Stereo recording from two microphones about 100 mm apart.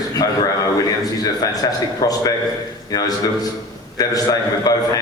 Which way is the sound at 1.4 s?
40° left (ahead or behind).